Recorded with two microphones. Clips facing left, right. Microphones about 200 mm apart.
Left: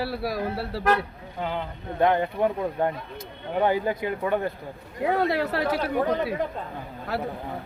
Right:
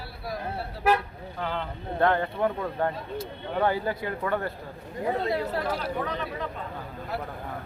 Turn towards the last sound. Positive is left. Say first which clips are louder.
# left 4 dB
turn(degrees=75)  # may be behind; listen again after turning